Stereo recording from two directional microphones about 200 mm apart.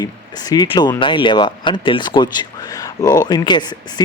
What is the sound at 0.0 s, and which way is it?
Speech, 20° left (ahead or behind).